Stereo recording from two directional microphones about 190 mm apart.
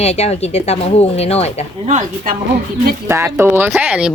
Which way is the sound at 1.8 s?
40° right (ahead or behind).